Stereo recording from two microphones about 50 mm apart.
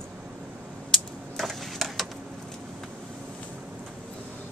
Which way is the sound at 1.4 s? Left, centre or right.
Centre.